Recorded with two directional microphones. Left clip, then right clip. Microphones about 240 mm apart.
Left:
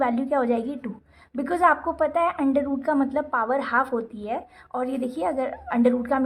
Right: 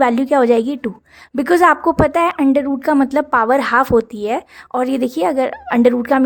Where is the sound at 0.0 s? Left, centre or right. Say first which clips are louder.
Right 10 dB; right.